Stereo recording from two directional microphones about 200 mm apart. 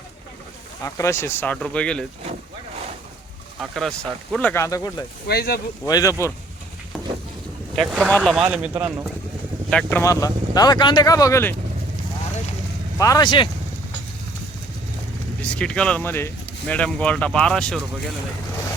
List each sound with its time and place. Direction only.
0.9 s speech: 15° left (ahead or behind)
3.6 s speech: centre (ahead or behind); by 5.0 s 20° left (ahead or behind)
5.3 s speech: 50° left (ahead or behind)
5.8 s speech: 15° left (ahead or behind)
7.8 s speech: centre (ahead or behind)
9.6 s speech: 5° left (ahead or behind)
10.0 s speech: 15° left (ahead or behind)
13.0 s speech: 15° left (ahead or behind)
15.4 s speech: 5° left (ahead or behind)